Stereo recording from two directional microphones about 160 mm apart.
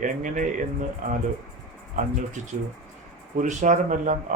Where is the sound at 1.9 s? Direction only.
50° right (ahead or behind).